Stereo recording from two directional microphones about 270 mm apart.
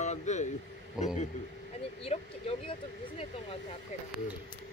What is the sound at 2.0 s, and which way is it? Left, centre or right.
Speech, left.